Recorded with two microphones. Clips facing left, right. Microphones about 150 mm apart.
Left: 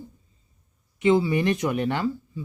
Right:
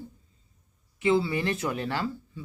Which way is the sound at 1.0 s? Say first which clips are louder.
Left 4 dB; 20° left (ahead or behind).